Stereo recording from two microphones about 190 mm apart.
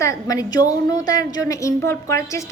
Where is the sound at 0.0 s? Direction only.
15° left (ahead or behind).